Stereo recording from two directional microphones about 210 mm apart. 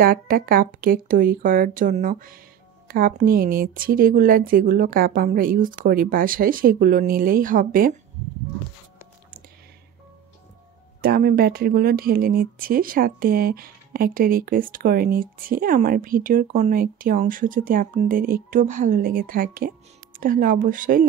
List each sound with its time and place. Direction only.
0.0 s speech: 45° right (ahead or behind)
11.0 s speech: 45° right (ahead or behind)